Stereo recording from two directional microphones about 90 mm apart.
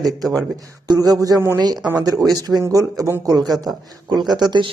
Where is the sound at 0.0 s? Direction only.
45° right (ahead or behind).